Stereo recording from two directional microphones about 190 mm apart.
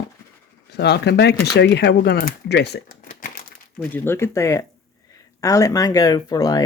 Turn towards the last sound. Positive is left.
turn(degrees=20)  # may be behind; listen again after turning